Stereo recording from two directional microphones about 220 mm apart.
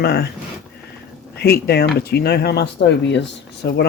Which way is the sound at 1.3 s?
45° left (ahead or behind).